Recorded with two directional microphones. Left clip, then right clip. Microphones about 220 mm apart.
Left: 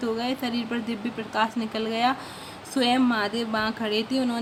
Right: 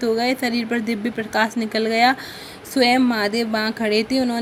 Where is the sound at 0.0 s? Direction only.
15° right (ahead or behind).